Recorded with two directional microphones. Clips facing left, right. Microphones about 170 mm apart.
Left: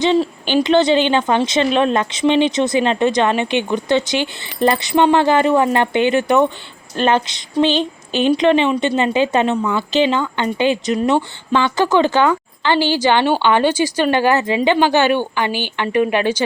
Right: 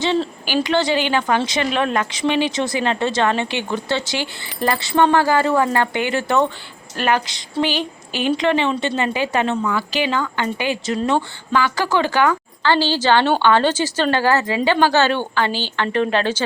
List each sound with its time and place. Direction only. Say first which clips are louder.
0.0 s speech: left 4 dB; 15° left (ahead or behind)